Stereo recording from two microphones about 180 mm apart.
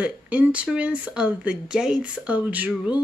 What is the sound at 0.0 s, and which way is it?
Speech, 5° right (ahead or behind).